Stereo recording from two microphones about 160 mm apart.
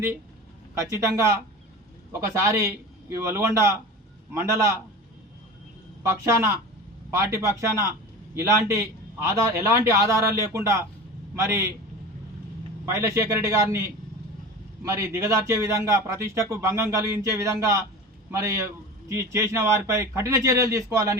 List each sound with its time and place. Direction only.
0.8 s speech: 20° right (ahead or behind)
6.0 s speech: 20° right (ahead or behind)
12.8 s speech: 15° right (ahead or behind)